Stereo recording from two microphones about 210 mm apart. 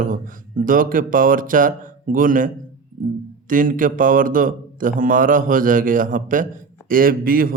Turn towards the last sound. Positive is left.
turn(degrees=-45)  # may be behind; listen again after turning